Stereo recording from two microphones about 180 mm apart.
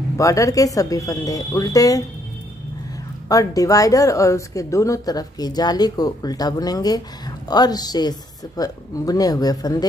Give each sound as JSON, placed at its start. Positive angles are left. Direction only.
{"t": 0.2, "sound": "speech", "side_deg": 20}
{"t": 3.3, "sound": "speech", "side_deg": 20}